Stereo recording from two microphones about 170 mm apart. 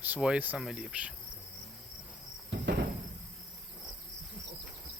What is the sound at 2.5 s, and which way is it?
Cricket, 75° right (ahead or behind).